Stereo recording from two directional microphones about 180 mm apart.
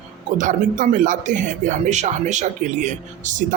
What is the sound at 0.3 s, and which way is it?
Speech, 45° right (ahead or behind).